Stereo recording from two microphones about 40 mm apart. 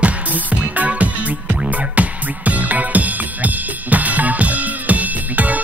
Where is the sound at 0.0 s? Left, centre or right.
Right.